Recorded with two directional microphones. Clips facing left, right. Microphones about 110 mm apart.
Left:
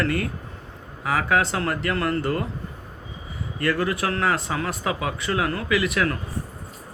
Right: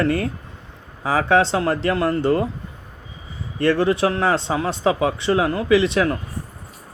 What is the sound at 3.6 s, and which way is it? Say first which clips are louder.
A man's voice: right 6 dB; 25° right (ahead or behind).